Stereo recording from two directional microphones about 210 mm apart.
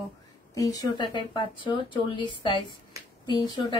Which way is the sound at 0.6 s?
15° left (ahead or behind).